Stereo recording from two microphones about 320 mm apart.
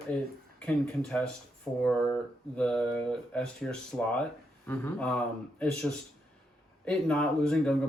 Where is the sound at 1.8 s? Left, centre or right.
Centre.